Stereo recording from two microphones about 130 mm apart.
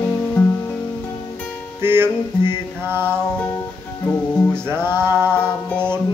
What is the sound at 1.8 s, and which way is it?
Mantra, 15° right (ahead or behind).